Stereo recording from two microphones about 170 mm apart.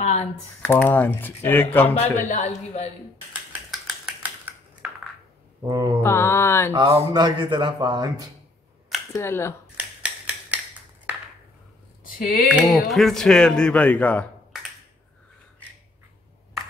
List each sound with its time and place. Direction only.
0.0 s typing: 40° left (ahead or behind)
0.7 s speech: 10° left (ahead or behind)
2.2 s a man's voice: 45° left (ahead or behind)
4.2 s typing: 10° right (ahead or behind)
5.7 s speech: 25° right (ahead or behind)
6.0 s speech: 15° left (ahead or behind)
6.8 s speech: 25° right (ahead or behind)
9.1 s speech: 15° left (ahead or behind)
9.8 s a sound: 10° right (ahead or behind)
12.0 s a sound: 55° left (ahead or behind)
12.5 s speech: centre (ahead or behind)